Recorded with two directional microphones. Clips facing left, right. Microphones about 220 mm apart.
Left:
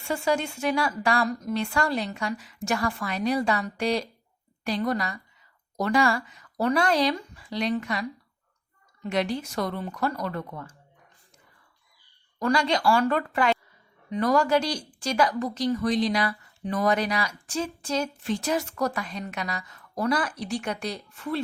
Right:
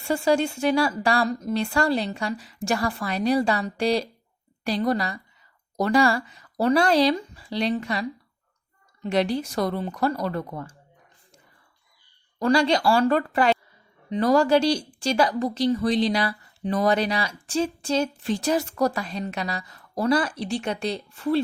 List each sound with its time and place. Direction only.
0.1 s speech: 30° right (ahead or behind)
9.0 s speech: 30° right (ahead or behind)
12.4 s speech: 30° right (ahead or behind)